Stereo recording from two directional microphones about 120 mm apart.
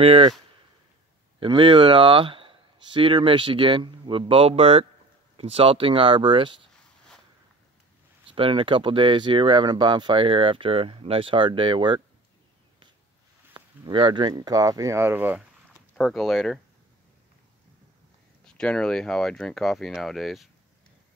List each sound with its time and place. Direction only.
0.0 s speech: 50° right (ahead or behind)
1.4 s speech: 45° right (ahead or behind)
8.3 s speech: 45° right (ahead or behind)
13.5 s speech: 45° right (ahead or behind); by 15.4 s 15° right (ahead or behind)
16.0 s speech: centre (ahead or behind)
18.4 s speech: 5° left (ahead or behind)